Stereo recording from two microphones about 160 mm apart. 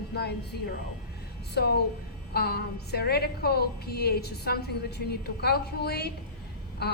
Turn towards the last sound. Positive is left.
turn(degrees=90)